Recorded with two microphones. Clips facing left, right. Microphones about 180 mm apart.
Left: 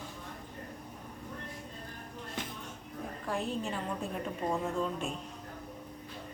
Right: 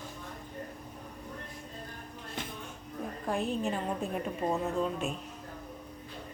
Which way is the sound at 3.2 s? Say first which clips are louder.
Right 3 dB; 15° right (ahead or behind).